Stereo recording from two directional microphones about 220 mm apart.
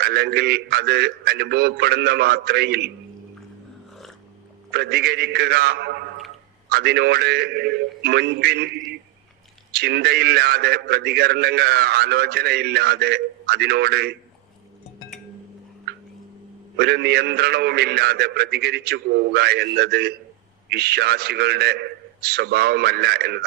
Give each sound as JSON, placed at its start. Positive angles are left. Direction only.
{"t": 0.0, "sound": "a man's voice", "side_deg": -45}
{"t": 4.7, "sound": "a man's voice", "side_deg": -50}
{"t": 16.7, "sound": "a man's voice", "side_deg": -45}